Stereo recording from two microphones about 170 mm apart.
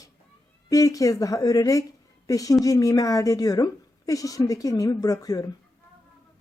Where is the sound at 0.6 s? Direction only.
20° left (ahead or behind).